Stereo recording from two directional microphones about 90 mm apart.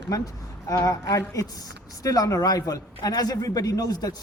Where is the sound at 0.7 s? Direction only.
40° left (ahead or behind).